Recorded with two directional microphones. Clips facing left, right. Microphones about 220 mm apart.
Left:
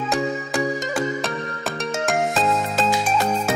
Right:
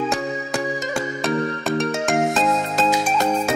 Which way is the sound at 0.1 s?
Centre (ahead or behind).